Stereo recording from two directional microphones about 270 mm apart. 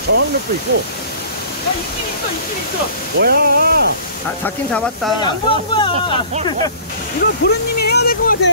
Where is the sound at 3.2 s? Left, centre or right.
Right.